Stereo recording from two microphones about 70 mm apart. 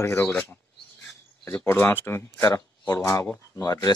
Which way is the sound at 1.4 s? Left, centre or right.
Left.